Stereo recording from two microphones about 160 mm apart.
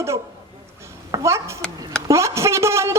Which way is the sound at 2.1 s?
20° right (ahead or behind).